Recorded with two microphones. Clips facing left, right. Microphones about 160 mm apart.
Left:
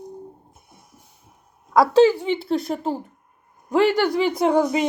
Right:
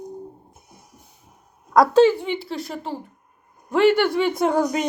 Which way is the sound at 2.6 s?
45° left (ahead or behind).